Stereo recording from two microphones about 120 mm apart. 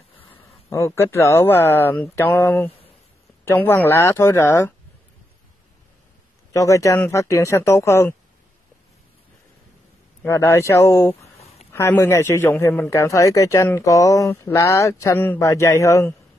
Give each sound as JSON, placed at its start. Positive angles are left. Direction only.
{"t": 0.7, "sound": "a man's voice", "side_deg": 25}
{"t": 6.5, "sound": "a man's voice", "side_deg": 25}
{"t": 10.2, "sound": "a man's voice", "side_deg": 20}